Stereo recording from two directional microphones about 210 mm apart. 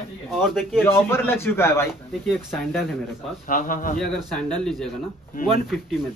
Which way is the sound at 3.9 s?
5° left (ahead or behind).